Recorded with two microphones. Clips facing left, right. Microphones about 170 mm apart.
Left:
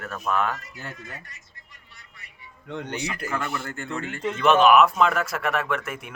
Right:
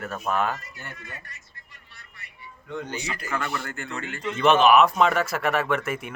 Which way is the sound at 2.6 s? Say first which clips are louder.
Left 1 dB; 70° left (ahead or behind).